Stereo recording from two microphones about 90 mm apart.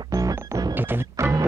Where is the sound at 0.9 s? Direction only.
25° right (ahead or behind).